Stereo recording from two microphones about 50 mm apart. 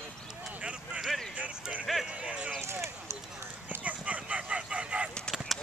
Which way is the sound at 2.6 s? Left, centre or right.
Right.